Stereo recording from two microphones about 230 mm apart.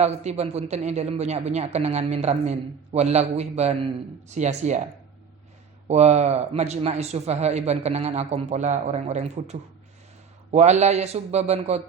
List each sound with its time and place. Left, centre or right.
0.0 s a man's voice: right
5.9 s a man's voice: right